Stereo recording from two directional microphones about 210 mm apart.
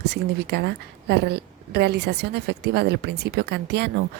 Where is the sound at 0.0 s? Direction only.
50° right (ahead or behind).